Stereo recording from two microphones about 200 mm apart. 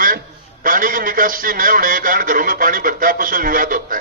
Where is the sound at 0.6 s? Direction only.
45° right (ahead or behind).